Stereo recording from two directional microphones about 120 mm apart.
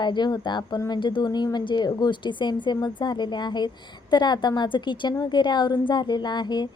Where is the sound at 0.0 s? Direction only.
40° left (ahead or behind).